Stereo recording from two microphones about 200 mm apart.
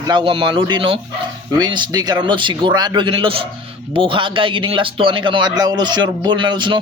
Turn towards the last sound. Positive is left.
turn(degrees=-25)  # may be behind; listen again after turning